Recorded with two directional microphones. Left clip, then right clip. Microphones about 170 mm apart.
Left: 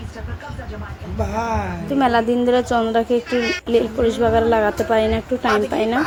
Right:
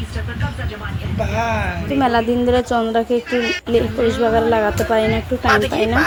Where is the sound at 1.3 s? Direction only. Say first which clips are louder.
Right 2 dB; 80° left.